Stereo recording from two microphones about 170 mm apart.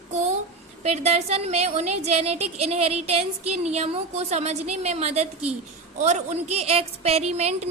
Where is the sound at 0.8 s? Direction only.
40° right (ahead or behind).